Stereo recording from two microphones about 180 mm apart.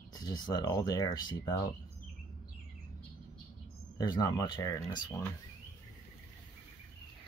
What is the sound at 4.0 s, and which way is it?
Speech, 20° left (ahead or behind).